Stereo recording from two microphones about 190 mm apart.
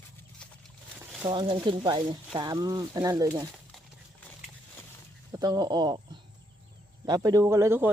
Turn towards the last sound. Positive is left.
turn(degrees=-15)  # may be behind; listen again after turning